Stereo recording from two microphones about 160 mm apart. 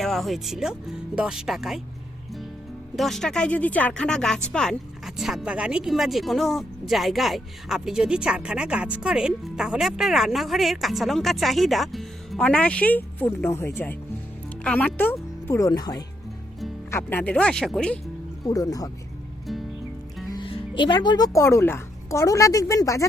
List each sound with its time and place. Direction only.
0.0 s speech: centre (ahead or behind)
2.9 s speech: centre (ahead or behind); by 16.0 s 25° left (ahead or behind)
16.9 s speech: 15° left (ahead or behind)
18.4 s speech: 20° left (ahead or behind)
19.5 s music: centre (ahead or behind)
20.2 s speech: 25° left (ahead or behind)